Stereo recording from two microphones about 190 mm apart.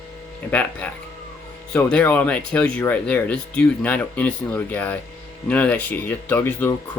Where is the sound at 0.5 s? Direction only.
10° left (ahead or behind).